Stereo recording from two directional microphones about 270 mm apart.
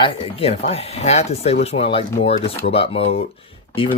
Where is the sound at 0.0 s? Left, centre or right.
Centre.